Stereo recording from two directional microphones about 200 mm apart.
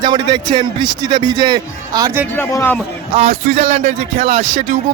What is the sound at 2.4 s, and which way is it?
Speech, 10° left (ahead or behind).